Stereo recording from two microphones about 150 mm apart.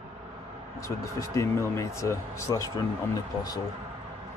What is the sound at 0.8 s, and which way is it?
Speech, 20° left (ahead or behind).